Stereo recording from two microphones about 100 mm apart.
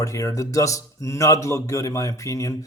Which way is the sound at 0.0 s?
35° left (ahead or behind).